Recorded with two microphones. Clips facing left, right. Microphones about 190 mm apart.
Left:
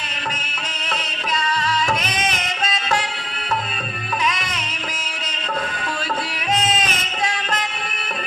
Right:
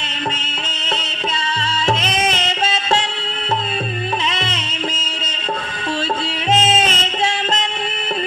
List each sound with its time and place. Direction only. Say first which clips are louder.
1.9 s music: right 4 dB; 25° right (ahead or behind)
4.3 s music: right 3 dB; 25° right (ahead or behind)
6.5 s music: right 5 dB; 25° right (ahead or behind)